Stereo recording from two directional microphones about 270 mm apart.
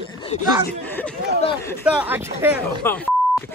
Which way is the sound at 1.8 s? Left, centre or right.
Centre.